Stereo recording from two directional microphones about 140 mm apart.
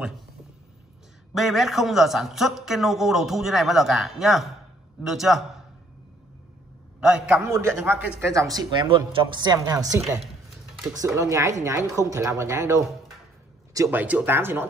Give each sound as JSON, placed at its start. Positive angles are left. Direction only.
{"t": 1.3, "sound": "a woman's voice", "side_deg": 0}
{"t": 7.0, "sound": "speech", "side_deg": -5}
{"t": 7.4, "sound": "speech", "side_deg": -20}